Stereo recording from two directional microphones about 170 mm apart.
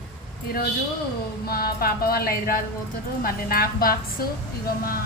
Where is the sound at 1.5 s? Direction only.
65° left (ahead or behind).